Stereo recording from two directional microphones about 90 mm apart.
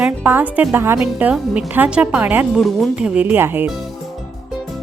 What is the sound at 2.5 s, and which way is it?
Speech, centre (ahead or behind).